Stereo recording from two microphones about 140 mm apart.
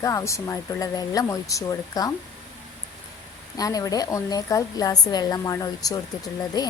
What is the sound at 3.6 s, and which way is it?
Speech, 25° left (ahead or behind).